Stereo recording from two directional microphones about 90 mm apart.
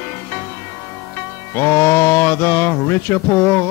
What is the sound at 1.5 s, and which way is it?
Speech, 30° left (ahead or behind).